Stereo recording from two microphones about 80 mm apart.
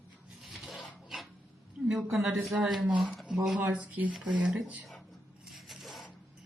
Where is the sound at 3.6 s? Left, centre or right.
Centre.